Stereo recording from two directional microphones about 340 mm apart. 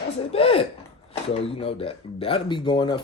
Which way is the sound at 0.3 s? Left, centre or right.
Centre.